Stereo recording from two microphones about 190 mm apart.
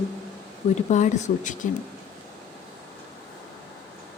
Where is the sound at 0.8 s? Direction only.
40° left (ahead or behind).